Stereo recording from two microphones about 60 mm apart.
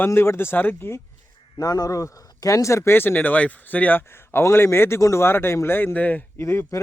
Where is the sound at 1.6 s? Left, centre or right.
Left.